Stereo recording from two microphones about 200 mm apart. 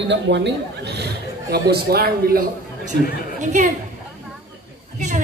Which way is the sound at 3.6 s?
35° right (ahead or behind).